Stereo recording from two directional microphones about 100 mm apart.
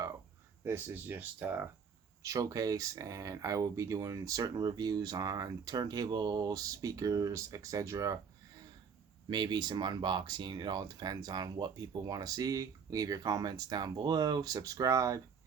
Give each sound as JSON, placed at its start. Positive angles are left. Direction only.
{"t": 0.6, "sound": "speech", "side_deg": -20}
{"t": 2.2, "sound": "speech", "side_deg": -35}
{"t": 9.3, "sound": "speech", "side_deg": -45}